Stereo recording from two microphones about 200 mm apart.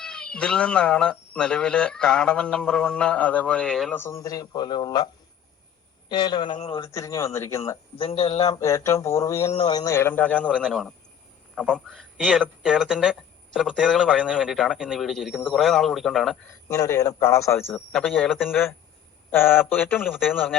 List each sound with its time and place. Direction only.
0.0 s speech: 5° left (ahead or behind); by 5.0 s 20° left (ahead or behind)
6.1 s a man's voice: 20° left (ahead or behind)
7.9 s a man's voice: 30° left (ahead or behind)
8.4 s a man's voice: 15° left (ahead or behind); by 16.4 s centre (ahead or behind)
16.6 s a man's voice: 15° left (ahead or behind); by 18.5 s centre (ahead or behind)
19.3 s a man's voice: 10° left (ahead or behind)